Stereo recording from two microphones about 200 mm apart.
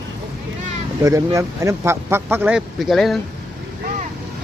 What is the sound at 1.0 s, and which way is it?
Speech, 15° right (ahead or behind).